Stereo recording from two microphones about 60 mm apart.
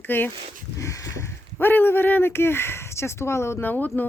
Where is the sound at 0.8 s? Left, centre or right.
Left.